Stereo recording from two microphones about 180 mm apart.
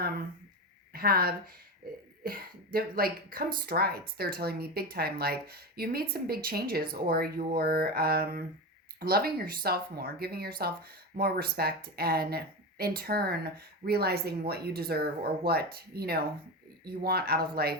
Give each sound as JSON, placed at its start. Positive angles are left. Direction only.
{"t": 0.9, "sound": "speech", "side_deg": -55}